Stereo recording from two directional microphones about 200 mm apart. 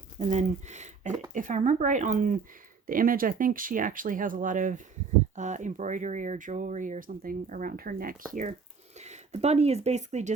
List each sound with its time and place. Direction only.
0.2 s speech: 35° right (ahead or behind)